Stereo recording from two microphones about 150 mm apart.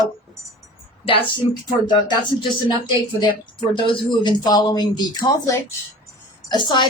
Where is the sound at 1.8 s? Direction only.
30° left (ahead or behind).